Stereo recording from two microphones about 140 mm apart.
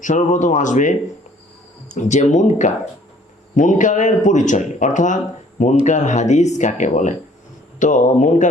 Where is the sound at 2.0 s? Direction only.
60° left (ahead or behind).